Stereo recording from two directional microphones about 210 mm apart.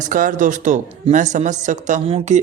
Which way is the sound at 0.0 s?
40° right (ahead or behind).